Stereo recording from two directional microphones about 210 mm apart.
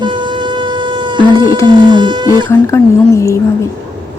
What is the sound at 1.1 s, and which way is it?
Speech, 20° right (ahead or behind).